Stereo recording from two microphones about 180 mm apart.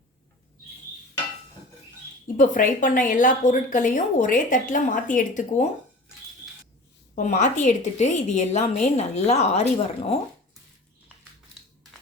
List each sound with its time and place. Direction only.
2.2 s a woman's voice: 45° left (ahead or behind)
7.2 s a woman's voice: 40° left (ahead or behind)